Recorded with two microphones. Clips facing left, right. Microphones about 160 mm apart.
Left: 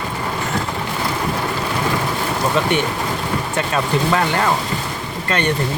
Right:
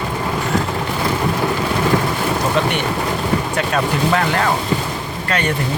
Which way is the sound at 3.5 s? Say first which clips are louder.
Right 1 dB; centre (ahead or behind).